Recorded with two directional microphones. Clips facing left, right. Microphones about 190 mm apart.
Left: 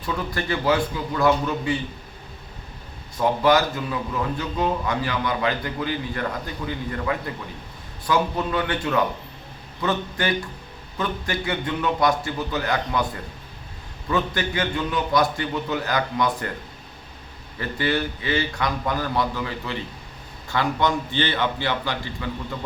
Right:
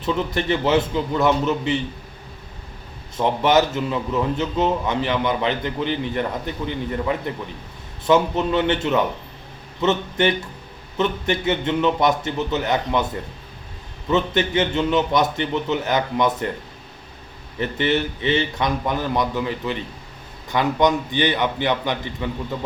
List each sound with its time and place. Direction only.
0.0 s a man's voice: 20° right (ahead or behind)
3.2 s a man's voice: 20° right (ahead or behind)
14.1 s a man's voice: 20° right (ahead or behind)
17.6 s a man's voice: 20° right (ahead or behind)